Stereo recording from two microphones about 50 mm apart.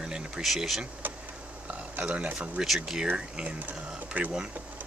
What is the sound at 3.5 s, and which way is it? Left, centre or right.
Speech, right.